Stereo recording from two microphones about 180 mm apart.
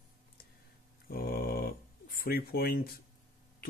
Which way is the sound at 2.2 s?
55° left (ahead or behind).